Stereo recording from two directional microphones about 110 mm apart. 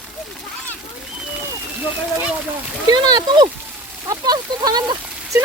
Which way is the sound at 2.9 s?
40° right (ahead or behind).